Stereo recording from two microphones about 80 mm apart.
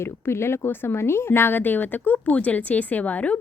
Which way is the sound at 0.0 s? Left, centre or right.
Left.